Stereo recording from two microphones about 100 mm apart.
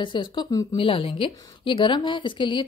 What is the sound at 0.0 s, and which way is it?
Speech, 50° left (ahead or behind).